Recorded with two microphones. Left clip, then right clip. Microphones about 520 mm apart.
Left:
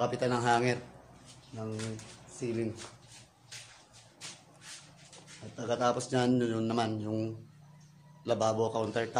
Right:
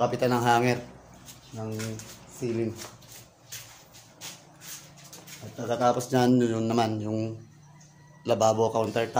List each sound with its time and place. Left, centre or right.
0.0 s a man's voice: left
2.3 s speech: left
5.6 s a man's voice: left